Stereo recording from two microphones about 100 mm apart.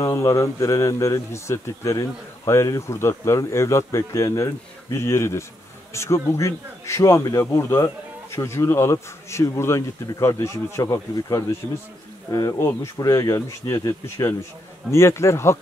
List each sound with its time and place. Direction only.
0.0 s a man's voice: 30° left (ahead or behind)